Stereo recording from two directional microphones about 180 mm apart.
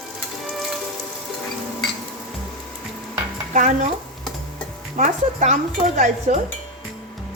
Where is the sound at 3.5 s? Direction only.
45° right (ahead or behind).